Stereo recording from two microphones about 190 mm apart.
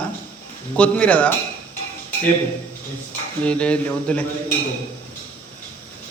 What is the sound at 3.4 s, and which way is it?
Speech, 5° left (ahead or behind).